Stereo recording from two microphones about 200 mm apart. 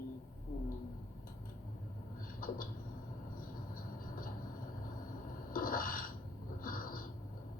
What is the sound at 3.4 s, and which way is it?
Train, 45° left (ahead or behind).